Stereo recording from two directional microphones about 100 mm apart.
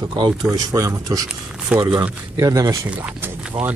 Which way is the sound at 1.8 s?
55° right (ahead or behind).